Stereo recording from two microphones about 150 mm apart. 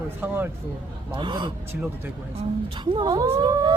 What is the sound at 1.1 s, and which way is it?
Speech, 30° right (ahead or behind).